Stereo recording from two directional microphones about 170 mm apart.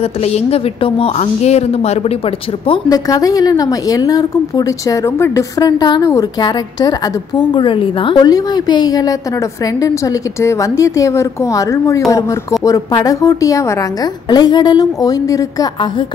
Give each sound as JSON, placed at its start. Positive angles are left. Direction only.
{"t": 0.2, "sound": "a woman's voice", "side_deg": 40}
{"t": 2.6, "sound": "speech", "side_deg": 25}